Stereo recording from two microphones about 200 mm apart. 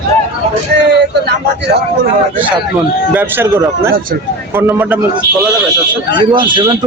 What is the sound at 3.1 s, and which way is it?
Speech, 10° right (ahead or behind).